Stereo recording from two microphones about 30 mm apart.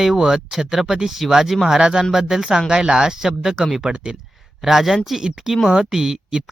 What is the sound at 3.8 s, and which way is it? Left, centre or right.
Speech, right.